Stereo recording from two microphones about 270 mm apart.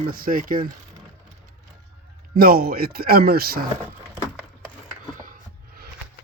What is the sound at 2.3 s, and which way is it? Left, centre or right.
Speech, right.